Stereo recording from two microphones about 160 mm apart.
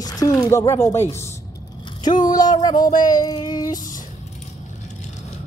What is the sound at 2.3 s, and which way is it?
Speech, 25° left (ahead or behind).